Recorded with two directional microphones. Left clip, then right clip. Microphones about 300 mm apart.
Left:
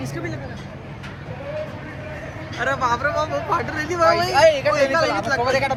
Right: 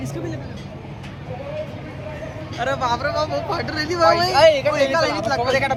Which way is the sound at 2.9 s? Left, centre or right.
Centre.